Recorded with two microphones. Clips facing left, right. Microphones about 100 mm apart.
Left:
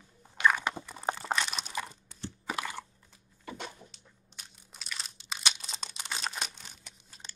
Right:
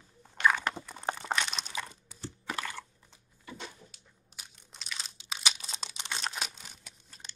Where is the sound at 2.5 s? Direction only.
10° left (ahead or behind).